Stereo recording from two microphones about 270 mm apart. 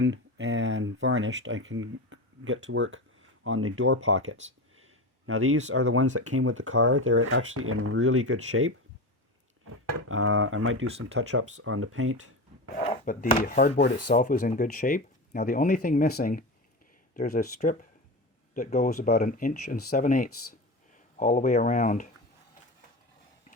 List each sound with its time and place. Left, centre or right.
0.0 s speech: right
10.1 s speech: right
13.1 s speech: left
13.8 s speech: left